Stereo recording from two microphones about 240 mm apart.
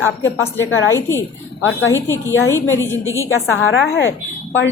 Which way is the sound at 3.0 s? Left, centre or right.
Centre.